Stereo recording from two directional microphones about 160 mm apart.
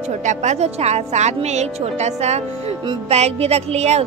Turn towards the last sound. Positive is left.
turn(degrees=-45)  # may be behind; listen again after turning